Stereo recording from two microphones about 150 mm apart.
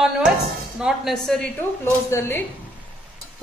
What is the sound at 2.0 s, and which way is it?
Speech, 15° left (ahead or behind).